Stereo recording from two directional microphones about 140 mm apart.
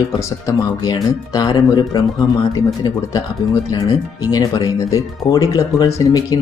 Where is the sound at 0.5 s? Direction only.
25° left (ahead or behind).